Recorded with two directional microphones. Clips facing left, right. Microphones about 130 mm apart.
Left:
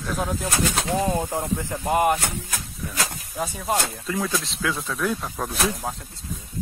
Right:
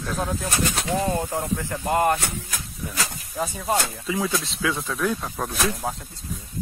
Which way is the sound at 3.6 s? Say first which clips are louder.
Even; centre (ahead or behind).